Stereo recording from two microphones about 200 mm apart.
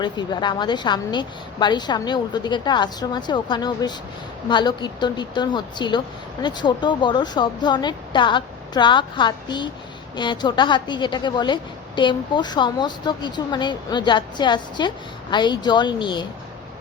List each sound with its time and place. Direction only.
0.0 s a woman's voice: 20° left (ahead or behind)